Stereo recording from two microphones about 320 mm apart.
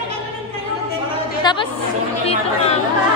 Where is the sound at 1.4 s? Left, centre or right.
Centre.